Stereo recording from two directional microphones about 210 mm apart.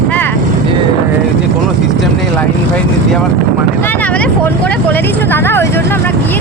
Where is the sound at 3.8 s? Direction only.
10° left (ahead or behind).